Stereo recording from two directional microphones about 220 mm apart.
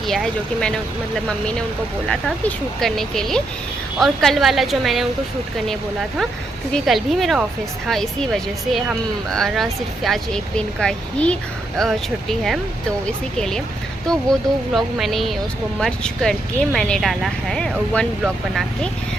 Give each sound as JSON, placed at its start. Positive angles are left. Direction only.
{"t": 0.1, "sound": "speech", "side_deg": 0}
{"t": 2.8, "sound": "speech", "side_deg": 0}